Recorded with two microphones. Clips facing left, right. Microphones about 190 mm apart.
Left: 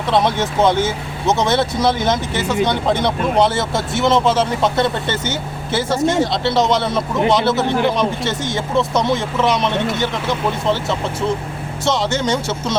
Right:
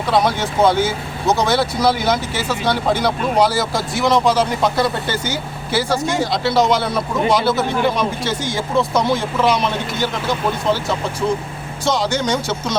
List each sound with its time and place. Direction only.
0.2 s speech: 20° left (ahead or behind)
6.1 s speech: centre (ahead or behind)
7.2 s speech: 20° left (ahead or behind)
8.9 s speech: centre (ahead or behind)